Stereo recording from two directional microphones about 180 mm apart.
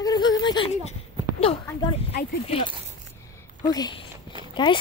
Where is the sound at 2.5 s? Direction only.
30° left (ahead or behind).